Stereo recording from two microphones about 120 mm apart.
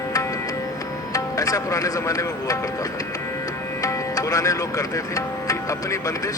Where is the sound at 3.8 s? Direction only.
25° left (ahead or behind).